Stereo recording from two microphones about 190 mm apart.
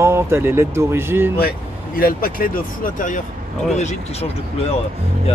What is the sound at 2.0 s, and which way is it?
Speech, 50° left (ahead or behind).